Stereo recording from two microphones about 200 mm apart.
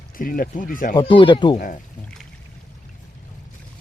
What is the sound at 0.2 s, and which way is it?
Speech, 45° left (ahead or behind).